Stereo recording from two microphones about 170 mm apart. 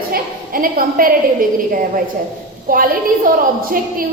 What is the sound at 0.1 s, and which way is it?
A woman's voice, 60° right (ahead or behind).